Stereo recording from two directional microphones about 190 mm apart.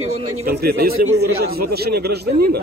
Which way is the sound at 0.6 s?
55° right (ahead or behind).